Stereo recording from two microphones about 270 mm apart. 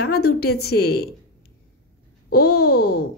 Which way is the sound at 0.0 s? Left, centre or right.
Left.